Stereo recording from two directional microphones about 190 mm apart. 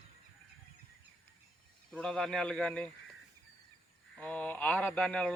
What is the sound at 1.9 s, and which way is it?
Speech, 5° left (ahead or behind).